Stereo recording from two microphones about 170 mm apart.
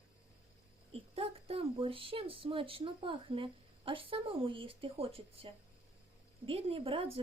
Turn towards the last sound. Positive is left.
turn(degrees=-35)  # may be behind; listen again after turning